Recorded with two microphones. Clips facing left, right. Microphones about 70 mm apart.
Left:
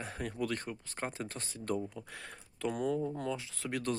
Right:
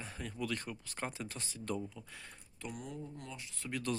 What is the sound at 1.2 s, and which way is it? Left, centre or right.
Speech, left.